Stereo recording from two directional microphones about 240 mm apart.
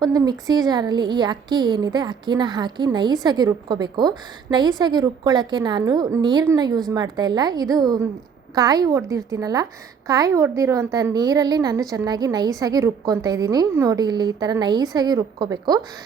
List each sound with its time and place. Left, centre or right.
0.0 s a woman's voice: centre